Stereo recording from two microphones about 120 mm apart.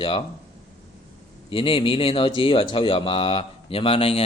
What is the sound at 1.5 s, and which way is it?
A man's voice, 50° left (ahead or behind).